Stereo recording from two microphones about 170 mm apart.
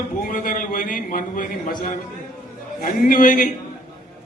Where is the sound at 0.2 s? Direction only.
55° left (ahead or behind).